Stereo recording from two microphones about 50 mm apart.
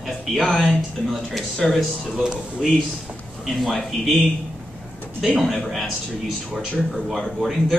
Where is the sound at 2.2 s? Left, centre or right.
Centre.